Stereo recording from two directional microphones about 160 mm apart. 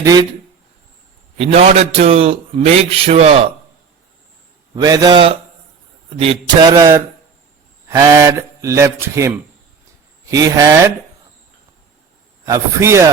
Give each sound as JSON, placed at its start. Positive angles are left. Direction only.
{"t": 0.0, "sound": "speech", "side_deg": -20}
{"t": 1.4, "sound": "a man's voice", "side_deg": -40}
{"t": 4.7, "sound": "speech", "side_deg": -25}
{"t": 6.7, "sound": "speech", "side_deg": -20}
{"t": 10.3, "sound": "speech", "side_deg": -20}
{"t": 12.5, "sound": "speech", "side_deg": -20}